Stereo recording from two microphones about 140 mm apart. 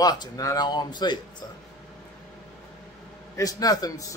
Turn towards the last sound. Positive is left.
turn(degrees=25)  # may be behind; listen again after turning